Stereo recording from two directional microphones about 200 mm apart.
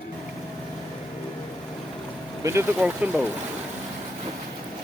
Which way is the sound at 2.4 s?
15° right (ahead or behind).